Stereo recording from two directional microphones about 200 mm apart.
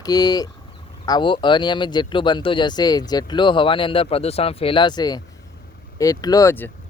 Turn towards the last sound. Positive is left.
turn(degrees=15)  # may be behind; listen again after turning